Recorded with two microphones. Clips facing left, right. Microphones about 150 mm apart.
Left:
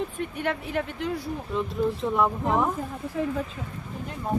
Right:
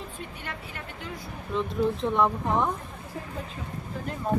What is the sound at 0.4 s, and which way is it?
Speech, 90° left.